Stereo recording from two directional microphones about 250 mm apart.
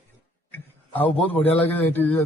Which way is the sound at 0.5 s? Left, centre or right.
Centre.